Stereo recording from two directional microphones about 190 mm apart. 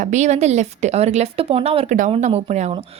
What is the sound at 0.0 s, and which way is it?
A woman's voice, 40° right (ahead or behind).